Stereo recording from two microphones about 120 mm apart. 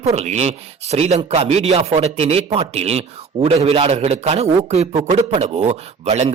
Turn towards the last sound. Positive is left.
turn(degrees=-65)  # may be behind; listen again after turning